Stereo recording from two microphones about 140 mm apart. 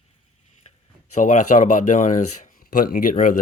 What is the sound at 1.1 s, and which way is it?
Speech, 60° left (ahead or behind).